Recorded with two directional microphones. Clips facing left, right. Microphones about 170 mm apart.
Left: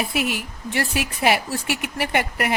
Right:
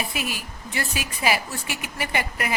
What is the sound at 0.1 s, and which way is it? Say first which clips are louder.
A woman's voice: left 6 dB; 65° left (ahead or behind).